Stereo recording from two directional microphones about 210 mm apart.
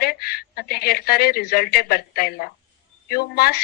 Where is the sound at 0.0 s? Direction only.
45° left (ahead or behind).